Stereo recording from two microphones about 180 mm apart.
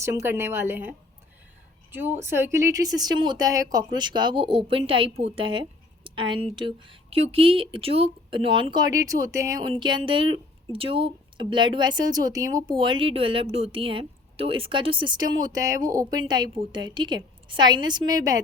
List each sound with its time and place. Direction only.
0.0 s a woman's voice: 15° right (ahead or behind)